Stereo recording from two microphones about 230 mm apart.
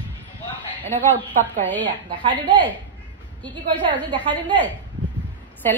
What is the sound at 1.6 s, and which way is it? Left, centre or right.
Speech, centre.